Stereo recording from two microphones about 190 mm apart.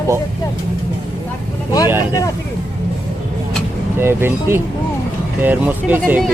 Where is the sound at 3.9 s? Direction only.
10° right (ahead or behind).